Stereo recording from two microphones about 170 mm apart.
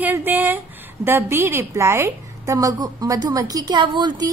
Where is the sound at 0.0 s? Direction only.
10° right (ahead or behind).